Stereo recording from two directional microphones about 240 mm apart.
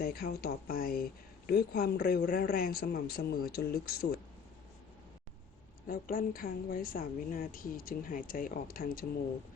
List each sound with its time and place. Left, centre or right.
0.0 s speech: left
5.9 s speech: left